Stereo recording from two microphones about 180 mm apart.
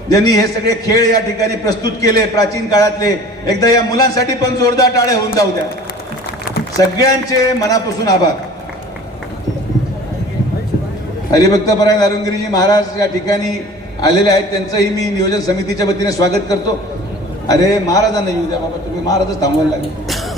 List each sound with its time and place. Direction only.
0.1 s a man's voice: 20° left (ahead or behind)
6.7 s a man's voice: 20° left (ahead or behind)
11.3 s a man's voice: 20° left (ahead or behind)